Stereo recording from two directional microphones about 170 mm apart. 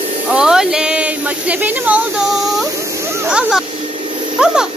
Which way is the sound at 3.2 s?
5° right (ahead or behind).